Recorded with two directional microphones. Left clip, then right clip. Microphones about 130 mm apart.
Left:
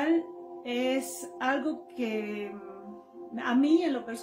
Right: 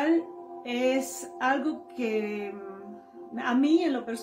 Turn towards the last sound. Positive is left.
turn(degrees=10)  # may be behind; listen again after turning